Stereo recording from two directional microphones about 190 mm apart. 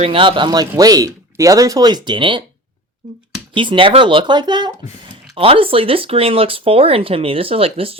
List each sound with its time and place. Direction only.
0.0 s speech: 30° right (ahead or behind)
3.5 s speech: 25° right (ahead or behind)